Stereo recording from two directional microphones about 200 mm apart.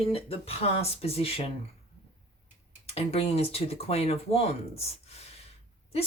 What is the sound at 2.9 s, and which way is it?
Speech, 30° left (ahead or behind).